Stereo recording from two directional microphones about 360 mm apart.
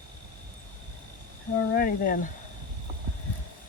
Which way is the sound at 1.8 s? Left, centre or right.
Left.